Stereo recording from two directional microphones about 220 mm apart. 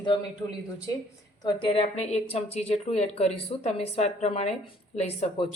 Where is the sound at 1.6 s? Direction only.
25° left (ahead or behind).